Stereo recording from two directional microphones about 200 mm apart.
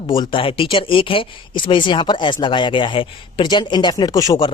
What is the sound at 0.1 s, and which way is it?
Speech, 25° left (ahead or behind).